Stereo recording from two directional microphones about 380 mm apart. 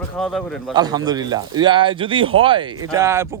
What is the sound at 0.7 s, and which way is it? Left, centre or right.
Speech, centre.